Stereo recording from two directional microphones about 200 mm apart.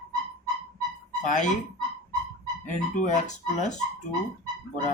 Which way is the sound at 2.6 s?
40° left (ahead or behind).